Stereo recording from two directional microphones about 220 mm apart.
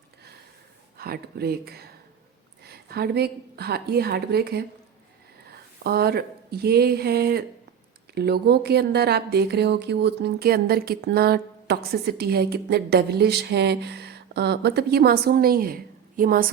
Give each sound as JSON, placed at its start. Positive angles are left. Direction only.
{"t": 0.9, "sound": "a woman's voice", "side_deg": -45}